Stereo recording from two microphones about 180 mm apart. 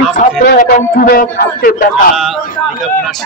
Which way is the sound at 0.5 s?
50° left (ahead or behind).